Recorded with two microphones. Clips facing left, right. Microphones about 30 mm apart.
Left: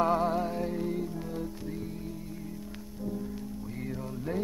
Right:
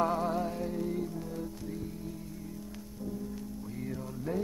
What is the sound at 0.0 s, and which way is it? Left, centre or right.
Music, centre.